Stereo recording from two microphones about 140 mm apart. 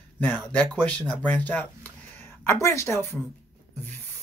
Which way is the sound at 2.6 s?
20° left (ahead or behind).